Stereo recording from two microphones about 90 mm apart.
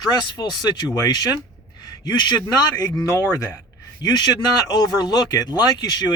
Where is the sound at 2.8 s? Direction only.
35° left (ahead or behind).